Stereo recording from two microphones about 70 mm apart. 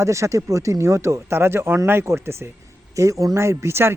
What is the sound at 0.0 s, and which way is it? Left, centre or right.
Speech, right.